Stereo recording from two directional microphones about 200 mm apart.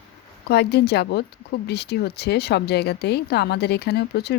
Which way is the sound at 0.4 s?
55° left (ahead or behind).